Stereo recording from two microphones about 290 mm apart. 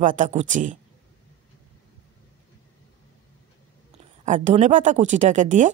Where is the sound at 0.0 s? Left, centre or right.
Right.